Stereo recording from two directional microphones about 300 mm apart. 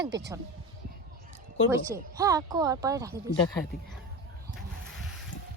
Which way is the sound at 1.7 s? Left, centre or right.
Centre.